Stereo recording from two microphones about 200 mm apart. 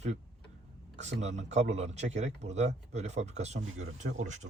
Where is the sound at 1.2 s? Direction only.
35° right (ahead or behind).